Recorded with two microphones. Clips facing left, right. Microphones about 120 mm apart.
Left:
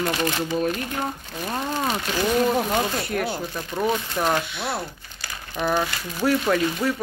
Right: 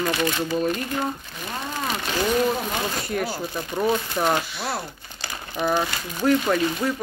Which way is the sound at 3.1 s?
Centre (ahead or behind).